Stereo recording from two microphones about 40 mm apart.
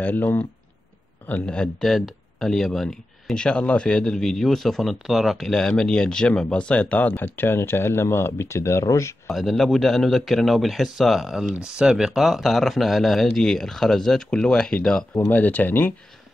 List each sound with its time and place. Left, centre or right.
0.0 s speech: left
1.4 s speech: left
1.8 s speech: centre
3.3 s speech: left
4.3 s speech: centre
5.0 s speech: centre
5.5 s speech: centre; by 7.2 s left
7.2 s speech: left
9.3 s speech: centre
11.6 s speech: centre
15.1 s speech: left